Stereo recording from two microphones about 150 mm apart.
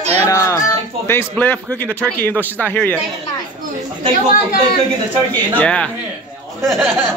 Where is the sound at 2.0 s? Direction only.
10° left (ahead or behind).